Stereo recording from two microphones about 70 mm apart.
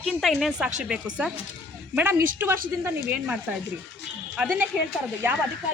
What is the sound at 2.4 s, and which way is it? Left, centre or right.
Speech, right.